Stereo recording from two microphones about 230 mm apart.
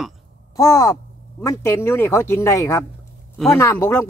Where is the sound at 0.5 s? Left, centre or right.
Centre.